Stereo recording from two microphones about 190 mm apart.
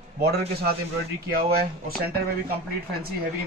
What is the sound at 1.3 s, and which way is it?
Speech, 50° right (ahead or behind).